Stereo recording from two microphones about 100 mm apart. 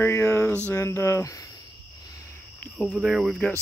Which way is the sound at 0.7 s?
30° left (ahead or behind).